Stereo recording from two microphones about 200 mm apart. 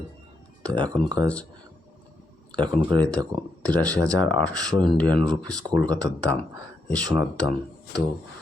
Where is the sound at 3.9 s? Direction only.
15° right (ahead or behind).